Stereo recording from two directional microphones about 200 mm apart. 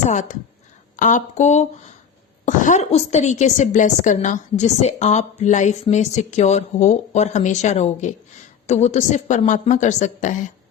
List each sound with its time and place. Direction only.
0.1 s a woman's voice: 35° left (ahead or behind)